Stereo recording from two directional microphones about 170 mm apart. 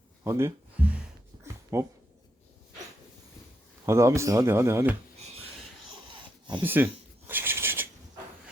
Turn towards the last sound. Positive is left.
turn(degrees=-15)  # may be behind; listen again after turning